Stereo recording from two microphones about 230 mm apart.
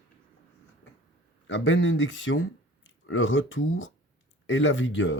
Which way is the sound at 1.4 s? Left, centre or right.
Left.